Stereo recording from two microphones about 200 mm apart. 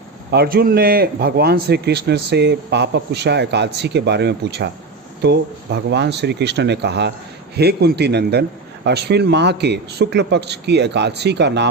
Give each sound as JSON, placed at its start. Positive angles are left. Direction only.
{"t": 0.3, "sound": "a man's voice", "side_deg": -50}